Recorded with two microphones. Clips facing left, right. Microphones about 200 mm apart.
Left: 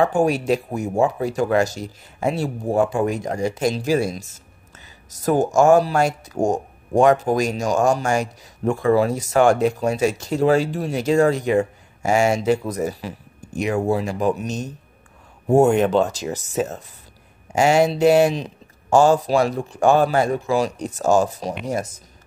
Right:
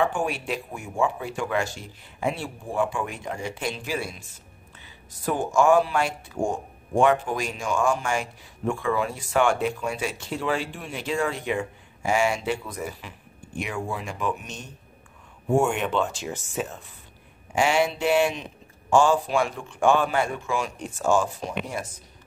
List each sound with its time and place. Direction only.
0.0 s speech: 40° left (ahead or behind)